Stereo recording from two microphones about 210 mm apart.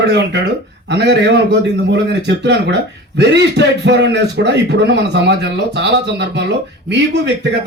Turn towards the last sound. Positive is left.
turn(degrees=-55)  # may be behind; listen again after turning